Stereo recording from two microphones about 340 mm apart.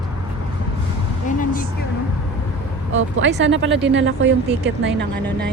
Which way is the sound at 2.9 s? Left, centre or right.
Right.